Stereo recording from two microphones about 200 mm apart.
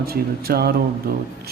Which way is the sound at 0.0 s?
50° right (ahead or behind).